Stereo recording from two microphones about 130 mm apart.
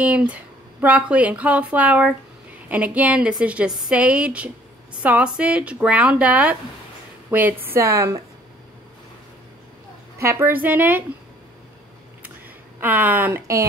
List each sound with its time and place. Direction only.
0.0 s a woman's voice: 10° right (ahead or behind)
10.1 s speech: 20° right (ahead or behind)
12.8 s speech: 15° right (ahead or behind)